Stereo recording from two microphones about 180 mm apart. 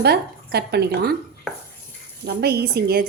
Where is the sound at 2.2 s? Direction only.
65° right (ahead or behind).